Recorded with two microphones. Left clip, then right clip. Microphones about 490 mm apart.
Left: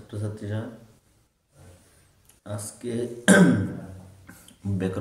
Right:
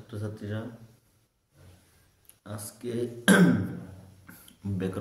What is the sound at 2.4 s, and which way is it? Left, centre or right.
A man's voice, right.